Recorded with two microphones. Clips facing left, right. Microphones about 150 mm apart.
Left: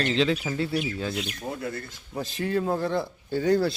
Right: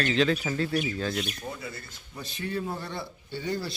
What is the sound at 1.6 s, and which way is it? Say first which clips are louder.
Speech: left 7 dB; 55° left (ahead or behind).